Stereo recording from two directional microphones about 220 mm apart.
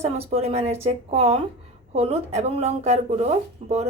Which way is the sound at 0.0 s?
30° right (ahead or behind).